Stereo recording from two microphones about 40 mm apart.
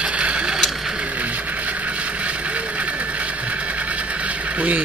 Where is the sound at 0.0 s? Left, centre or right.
Right.